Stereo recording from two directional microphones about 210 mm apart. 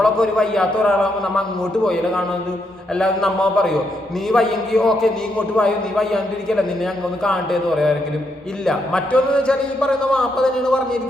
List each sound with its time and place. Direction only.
0.0 s a man's voice: 5° left (ahead or behind)